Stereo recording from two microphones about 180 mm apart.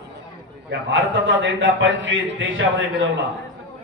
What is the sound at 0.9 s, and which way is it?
A man's voice, 90° right.